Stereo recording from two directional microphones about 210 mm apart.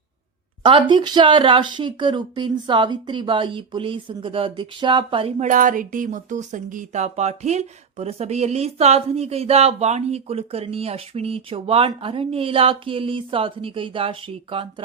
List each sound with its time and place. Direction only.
0.6 s speech: 25° right (ahead or behind)